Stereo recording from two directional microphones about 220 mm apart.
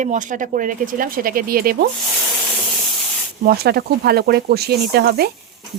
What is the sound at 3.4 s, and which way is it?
A woman's voice, 45° right (ahead or behind).